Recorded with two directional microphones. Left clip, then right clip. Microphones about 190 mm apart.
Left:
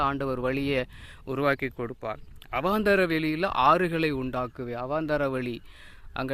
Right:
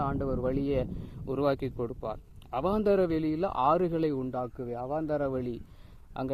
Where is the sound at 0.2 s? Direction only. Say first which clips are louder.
Left 3 dB; 35° left (ahead or behind).